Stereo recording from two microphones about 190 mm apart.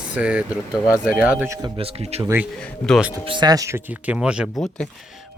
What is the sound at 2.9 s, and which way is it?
Speech, 5° right (ahead or behind).